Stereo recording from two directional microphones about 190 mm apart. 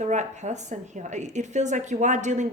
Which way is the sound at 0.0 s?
40° right (ahead or behind).